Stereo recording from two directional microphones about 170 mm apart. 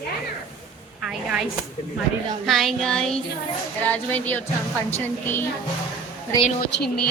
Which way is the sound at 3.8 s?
10° left (ahead or behind).